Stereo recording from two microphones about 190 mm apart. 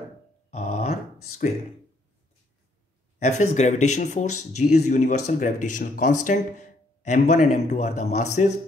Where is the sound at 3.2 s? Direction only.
40° left (ahead or behind).